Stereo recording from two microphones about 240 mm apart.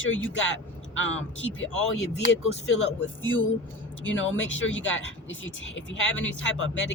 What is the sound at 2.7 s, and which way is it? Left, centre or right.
Speech, left.